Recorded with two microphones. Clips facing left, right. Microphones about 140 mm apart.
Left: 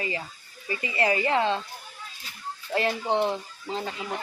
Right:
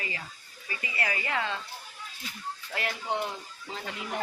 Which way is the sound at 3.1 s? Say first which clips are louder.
Left 7 dB; 30° left (ahead or behind).